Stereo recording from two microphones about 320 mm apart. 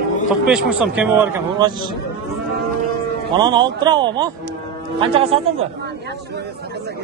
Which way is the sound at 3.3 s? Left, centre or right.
Centre.